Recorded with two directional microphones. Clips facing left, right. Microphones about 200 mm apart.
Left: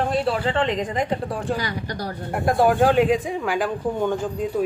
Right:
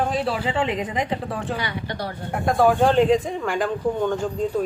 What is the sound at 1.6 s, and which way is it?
Speech, 40° left (ahead or behind).